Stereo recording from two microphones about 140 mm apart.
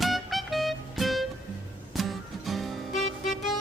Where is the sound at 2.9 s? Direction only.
60° left (ahead or behind).